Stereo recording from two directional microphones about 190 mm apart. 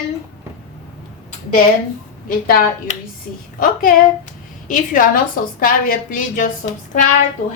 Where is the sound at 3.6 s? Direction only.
45° left (ahead or behind).